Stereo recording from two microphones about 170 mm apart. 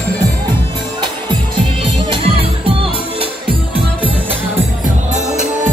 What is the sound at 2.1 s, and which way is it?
Music, 30° right (ahead or behind).